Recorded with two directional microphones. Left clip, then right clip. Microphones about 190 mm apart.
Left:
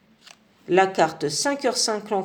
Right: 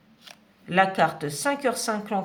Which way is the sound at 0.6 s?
30° left (ahead or behind).